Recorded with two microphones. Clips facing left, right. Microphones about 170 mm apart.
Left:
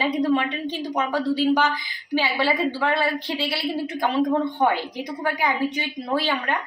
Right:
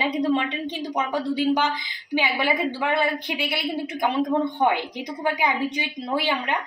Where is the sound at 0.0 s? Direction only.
15° right (ahead or behind).